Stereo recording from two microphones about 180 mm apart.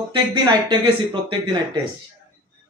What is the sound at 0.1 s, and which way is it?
Speech, 25° right (ahead or behind).